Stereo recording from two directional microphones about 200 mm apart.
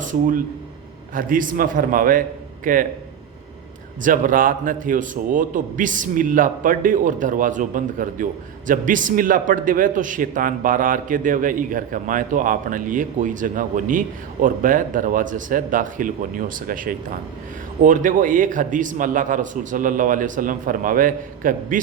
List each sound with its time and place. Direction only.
0.0 s a man's voice: 40° right (ahead or behind)
4.0 s a man's voice: 45° right (ahead or behind)